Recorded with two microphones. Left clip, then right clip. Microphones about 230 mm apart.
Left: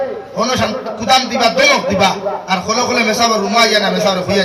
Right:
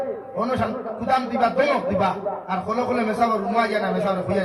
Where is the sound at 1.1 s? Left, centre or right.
Left.